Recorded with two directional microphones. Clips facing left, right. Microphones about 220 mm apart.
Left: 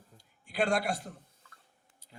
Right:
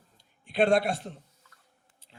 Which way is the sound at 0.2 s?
25° right (ahead or behind).